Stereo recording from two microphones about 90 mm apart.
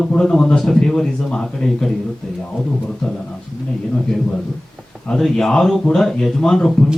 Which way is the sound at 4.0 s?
5° left (ahead or behind).